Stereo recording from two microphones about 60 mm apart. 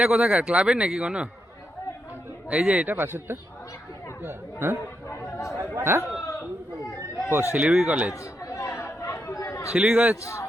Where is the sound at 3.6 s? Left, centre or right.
Left.